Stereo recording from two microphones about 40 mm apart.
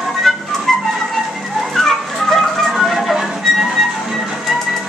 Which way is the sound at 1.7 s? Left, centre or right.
Centre.